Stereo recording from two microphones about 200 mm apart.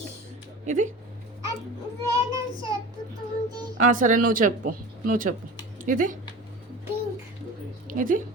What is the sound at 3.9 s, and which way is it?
Speech, 40° right (ahead or behind).